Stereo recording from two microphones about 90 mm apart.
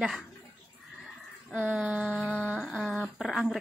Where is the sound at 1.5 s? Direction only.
15° right (ahead or behind).